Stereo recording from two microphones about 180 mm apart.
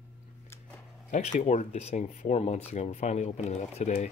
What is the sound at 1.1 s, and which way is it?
Speech, 40° left (ahead or behind).